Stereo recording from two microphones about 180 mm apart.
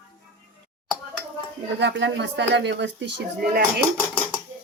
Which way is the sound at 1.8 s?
75° right (ahead or behind).